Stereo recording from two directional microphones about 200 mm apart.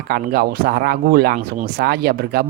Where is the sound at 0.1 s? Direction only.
50° right (ahead or behind).